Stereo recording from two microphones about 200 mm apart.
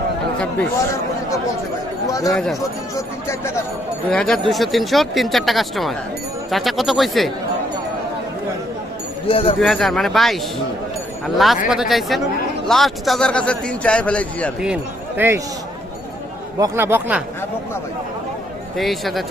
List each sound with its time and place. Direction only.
2.2 s speech: centre (ahead or behind)
2.9 s speech: 15° left (ahead or behind)
4.1 s speech: 5° left (ahead or behind)
9.2 s speech: 30° left (ahead or behind)
9.6 s speech: centre (ahead or behind)
11.7 s speech: centre (ahead or behind)
14.6 s speech: 5° right (ahead or behind)
16.6 s speech: 15° right (ahead or behind)
18.8 s speech: centre (ahead or behind)